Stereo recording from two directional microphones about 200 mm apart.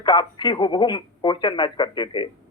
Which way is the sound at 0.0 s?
25° left (ahead or behind).